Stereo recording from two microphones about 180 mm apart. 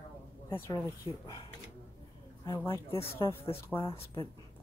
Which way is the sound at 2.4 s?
20° left (ahead or behind).